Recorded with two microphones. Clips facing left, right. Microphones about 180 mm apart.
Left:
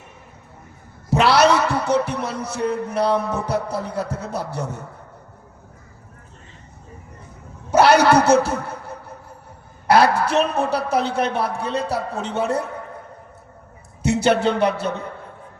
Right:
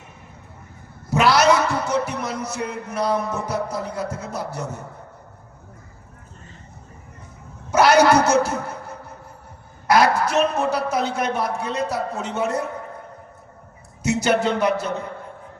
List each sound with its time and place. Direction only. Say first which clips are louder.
1.1 s a man's voice: left 1 dB; 30° left (ahead or behind)
7.7 s a man's voice: left 1 dB; 30° left (ahead or behind)
14.0 s a man's voice: left 2 dB; 30° left (ahead or behind)